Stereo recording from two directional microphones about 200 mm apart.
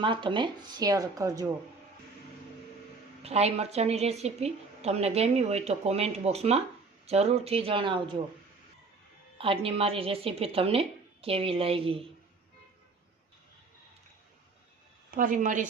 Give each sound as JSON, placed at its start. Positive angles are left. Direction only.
{"t": 0.0, "sound": "a woman's voice", "side_deg": -25}
{"t": 3.2, "sound": "a woman's voice", "side_deg": -30}
{"t": 9.4, "sound": "a woman's voice", "side_deg": -30}
{"t": 15.1, "sound": "a woman's voice", "side_deg": -40}